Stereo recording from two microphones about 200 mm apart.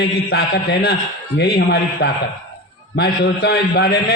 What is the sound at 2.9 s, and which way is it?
A man's voice, 55° left (ahead or behind).